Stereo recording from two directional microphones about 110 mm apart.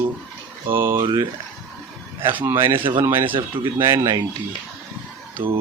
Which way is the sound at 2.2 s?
20° right (ahead or behind).